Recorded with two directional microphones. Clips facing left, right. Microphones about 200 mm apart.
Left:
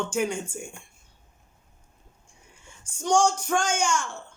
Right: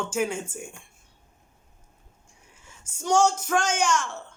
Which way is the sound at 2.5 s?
5° right (ahead or behind).